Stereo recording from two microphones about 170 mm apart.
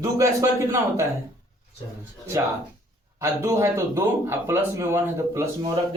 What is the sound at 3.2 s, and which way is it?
Speech, 15° right (ahead or behind).